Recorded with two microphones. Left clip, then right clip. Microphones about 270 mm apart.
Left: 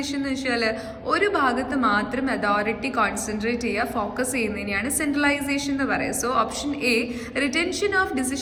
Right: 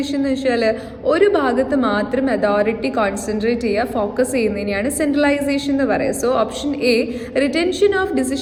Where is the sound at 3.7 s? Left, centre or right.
Right.